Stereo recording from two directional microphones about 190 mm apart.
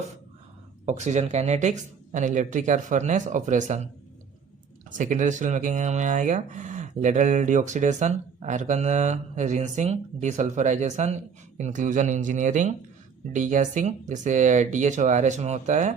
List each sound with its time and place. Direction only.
0.9 s speech: 35° right (ahead or behind)
4.9 s speech: 40° right (ahead or behind)